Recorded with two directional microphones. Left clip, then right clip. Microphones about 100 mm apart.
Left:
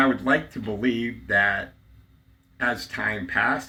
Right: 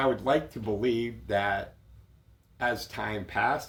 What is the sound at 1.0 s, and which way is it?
Speech, 20° right (ahead or behind).